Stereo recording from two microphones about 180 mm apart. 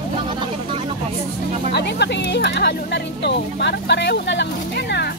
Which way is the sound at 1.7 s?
70° left (ahead or behind).